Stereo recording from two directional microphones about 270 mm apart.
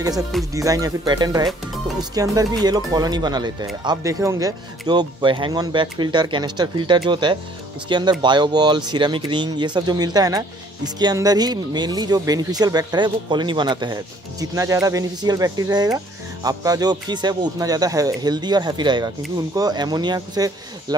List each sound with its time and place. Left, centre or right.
0.5 s speech: centre